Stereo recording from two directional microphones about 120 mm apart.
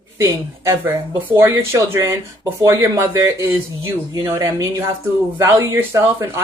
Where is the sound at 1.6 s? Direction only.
25° right (ahead or behind).